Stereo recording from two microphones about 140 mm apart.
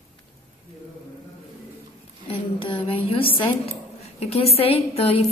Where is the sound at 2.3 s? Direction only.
40° left (ahead or behind).